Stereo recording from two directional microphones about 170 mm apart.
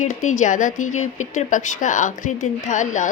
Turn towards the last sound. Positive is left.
turn(degrees=45)  # may be behind; listen again after turning